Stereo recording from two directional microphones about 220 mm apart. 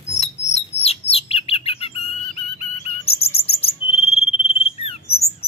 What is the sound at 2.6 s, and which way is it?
Cricket, 30° left (ahead or behind).